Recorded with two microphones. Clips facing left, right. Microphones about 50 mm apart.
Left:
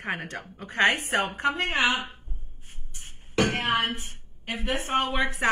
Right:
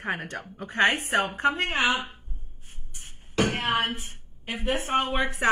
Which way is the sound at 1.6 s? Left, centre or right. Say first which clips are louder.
Even; left.